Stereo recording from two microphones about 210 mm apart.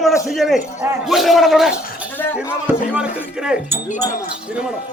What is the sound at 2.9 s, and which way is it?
Speech, 5° right (ahead or behind).